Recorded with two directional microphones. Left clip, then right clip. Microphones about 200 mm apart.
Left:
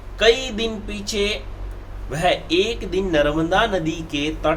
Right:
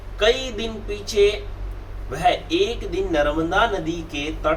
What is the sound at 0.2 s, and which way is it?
Speech, 45° left (ahead or behind).